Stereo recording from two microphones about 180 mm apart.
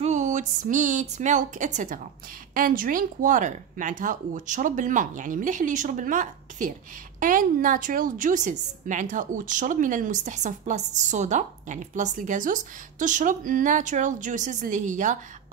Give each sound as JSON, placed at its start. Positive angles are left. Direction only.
{"t": 0.0, "sound": "a woman's voice", "side_deg": -40}